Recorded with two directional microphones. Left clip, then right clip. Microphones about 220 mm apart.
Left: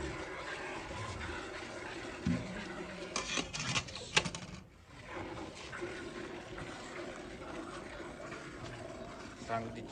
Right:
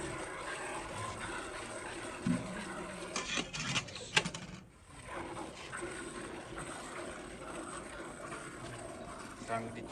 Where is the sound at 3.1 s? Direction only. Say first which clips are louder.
Even; 25° left (ahead or behind).